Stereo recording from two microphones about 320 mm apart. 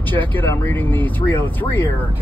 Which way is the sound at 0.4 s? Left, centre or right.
Centre.